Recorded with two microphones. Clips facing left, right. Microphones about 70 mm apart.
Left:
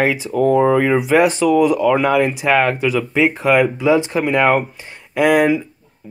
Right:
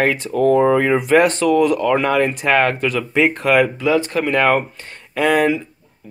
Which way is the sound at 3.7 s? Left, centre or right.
Centre.